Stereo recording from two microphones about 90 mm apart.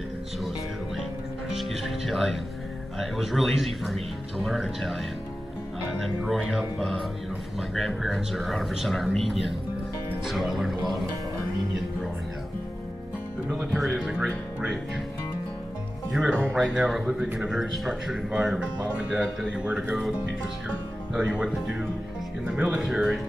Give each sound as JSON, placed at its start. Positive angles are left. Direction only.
{"t": 1.6, "sound": "speech", "side_deg": 0}
{"t": 6.0, "sound": "speech", "side_deg": 0}
{"t": 13.7, "sound": "speech", "side_deg": -5}
{"t": 16.1, "sound": "speech", "side_deg": -5}
{"t": 17.2, "sound": "speech", "side_deg": -20}
{"t": 17.5, "sound": "speech", "side_deg": -5}
{"t": 21.1, "sound": "speech", "side_deg": -10}